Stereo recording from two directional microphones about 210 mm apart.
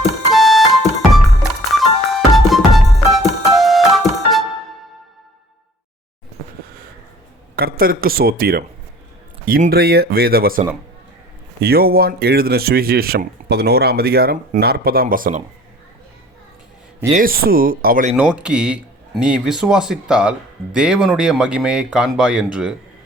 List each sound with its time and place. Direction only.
0.3 s music: centre (ahead or behind)
7.5 s speech: 45° right (ahead or behind)
11.6 s speech: 45° right (ahead or behind)
17.1 s speech: 40° right (ahead or behind)
18.2 s a man's voice: 5° right (ahead or behind)